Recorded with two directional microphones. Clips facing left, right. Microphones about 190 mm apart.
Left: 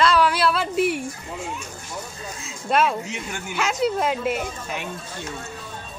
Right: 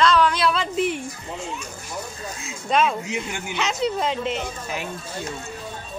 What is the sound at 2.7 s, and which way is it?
A woman's voice, 5° left (ahead or behind).